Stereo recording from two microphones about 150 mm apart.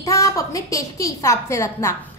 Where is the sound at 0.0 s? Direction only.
20° left (ahead or behind).